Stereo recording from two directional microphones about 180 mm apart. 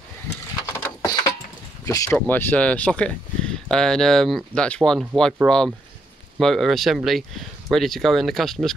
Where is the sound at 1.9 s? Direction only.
20° left (ahead or behind); by 5.3 s 5° left (ahead or behind).